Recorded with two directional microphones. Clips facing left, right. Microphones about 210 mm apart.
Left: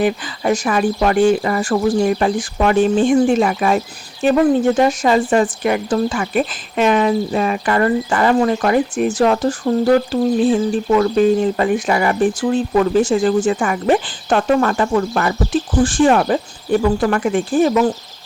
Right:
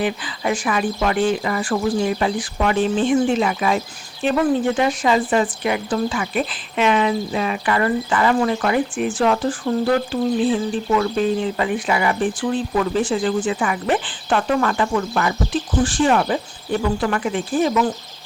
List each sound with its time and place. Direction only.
0.0 s speech: 40° left (ahead or behind)